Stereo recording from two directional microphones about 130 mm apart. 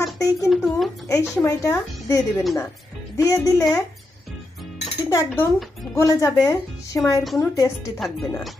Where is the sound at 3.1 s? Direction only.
25° left (ahead or behind).